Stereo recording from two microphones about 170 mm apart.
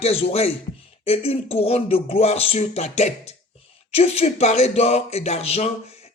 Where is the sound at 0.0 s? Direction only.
40° left (ahead or behind).